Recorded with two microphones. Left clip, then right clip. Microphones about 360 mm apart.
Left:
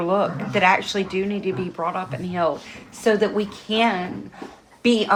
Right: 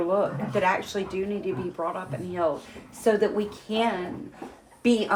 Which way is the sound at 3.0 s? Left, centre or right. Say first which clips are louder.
Left 3 dB; left.